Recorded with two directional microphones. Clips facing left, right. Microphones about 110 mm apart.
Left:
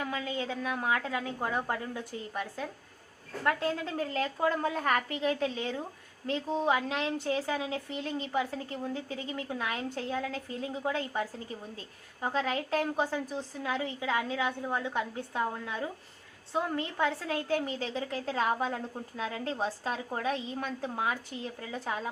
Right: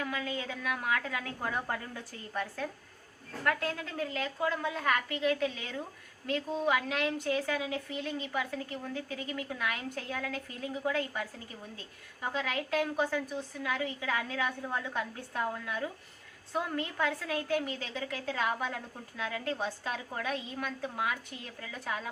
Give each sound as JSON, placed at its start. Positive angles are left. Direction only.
{"t": 0.0, "sound": "a woman's voice", "side_deg": 30}
{"t": 3.4, "sound": "a woman's voice", "side_deg": 25}